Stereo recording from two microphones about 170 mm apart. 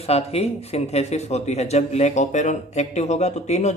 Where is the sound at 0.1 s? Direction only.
35° left (ahead or behind).